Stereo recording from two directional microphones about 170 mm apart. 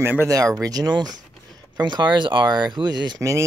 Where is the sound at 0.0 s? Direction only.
15° right (ahead or behind).